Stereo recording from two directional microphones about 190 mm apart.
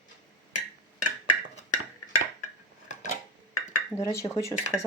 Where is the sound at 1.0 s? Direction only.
45° left (ahead or behind).